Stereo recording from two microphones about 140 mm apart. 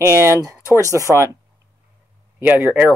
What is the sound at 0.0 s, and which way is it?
Speech, 20° right (ahead or behind).